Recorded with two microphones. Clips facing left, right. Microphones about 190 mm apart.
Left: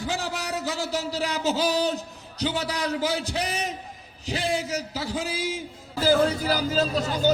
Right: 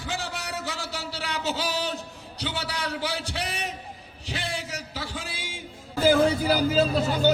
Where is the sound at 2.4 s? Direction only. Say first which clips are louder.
Left 5 dB; 35° left (ahead or behind).